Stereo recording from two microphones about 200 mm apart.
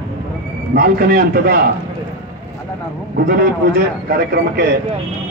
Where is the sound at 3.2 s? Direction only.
45° right (ahead or behind).